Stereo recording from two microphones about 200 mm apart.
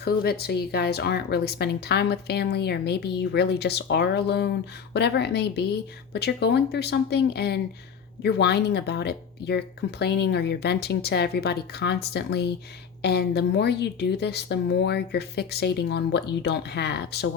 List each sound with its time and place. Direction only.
0.0 s speech: 50° left (ahead or behind)